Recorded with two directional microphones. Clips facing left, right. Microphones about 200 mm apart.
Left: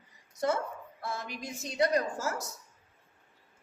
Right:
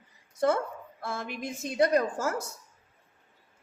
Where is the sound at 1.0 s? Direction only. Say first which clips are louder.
Right 3 dB; 50° right (ahead or behind).